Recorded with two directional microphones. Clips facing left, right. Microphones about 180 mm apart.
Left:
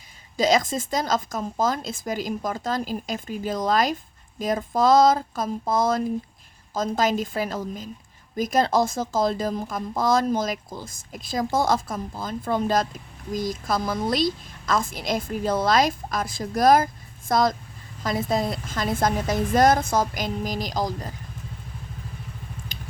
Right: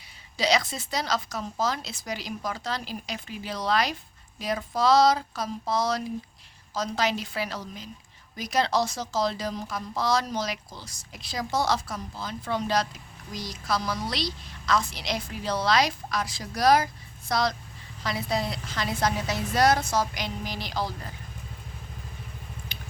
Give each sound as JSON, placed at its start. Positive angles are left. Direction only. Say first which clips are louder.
{"t": 0.3, "sound": "speech", "louder": "left 5 dB", "side_deg": 45}